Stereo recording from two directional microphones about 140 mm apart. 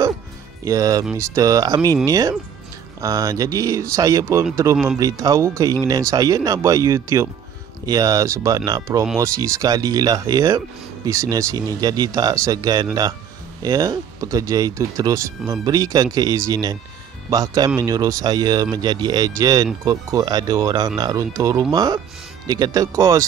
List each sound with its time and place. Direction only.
0.7 s speech: 25° right (ahead or behind)